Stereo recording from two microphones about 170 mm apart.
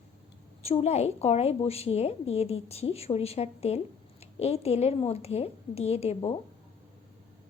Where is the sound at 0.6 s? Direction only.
35° left (ahead or behind).